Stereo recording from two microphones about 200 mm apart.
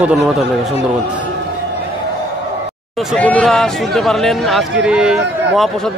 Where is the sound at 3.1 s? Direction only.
5° left (ahead or behind).